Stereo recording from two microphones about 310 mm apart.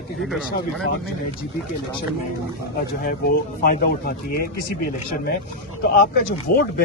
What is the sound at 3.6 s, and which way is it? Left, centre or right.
Speech, left.